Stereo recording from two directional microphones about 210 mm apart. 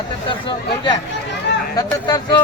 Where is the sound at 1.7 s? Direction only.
20° left (ahead or behind).